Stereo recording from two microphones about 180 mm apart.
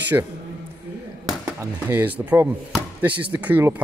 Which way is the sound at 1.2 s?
15° right (ahead or behind).